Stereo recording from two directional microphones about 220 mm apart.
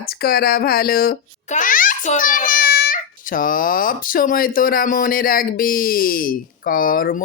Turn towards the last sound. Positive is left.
turn(degrees=40)  # may be behind; listen again after turning